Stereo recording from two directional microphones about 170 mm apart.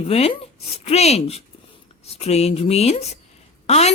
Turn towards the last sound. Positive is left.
turn(degrees=40)  # may be behind; listen again after turning